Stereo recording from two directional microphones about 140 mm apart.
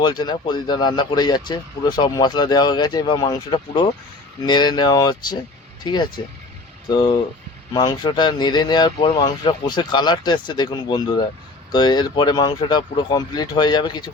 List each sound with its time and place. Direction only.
0.0 s speech: 30° left (ahead or behind)